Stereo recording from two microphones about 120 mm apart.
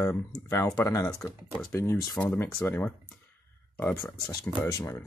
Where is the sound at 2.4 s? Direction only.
20° left (ahead or behind).